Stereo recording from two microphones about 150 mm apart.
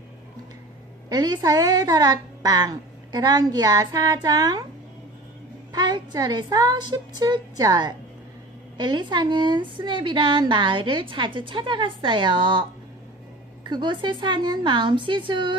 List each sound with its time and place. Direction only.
1.1 s a child's voice: 30° right (ahead or behind)
5.7 s a woman's voice: 30° right (ahead or behind)
13.7 s a woman's voice: 30° right (ahead or behind)